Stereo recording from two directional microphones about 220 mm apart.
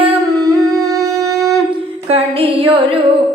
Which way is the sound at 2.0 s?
25° right (ahead or behind).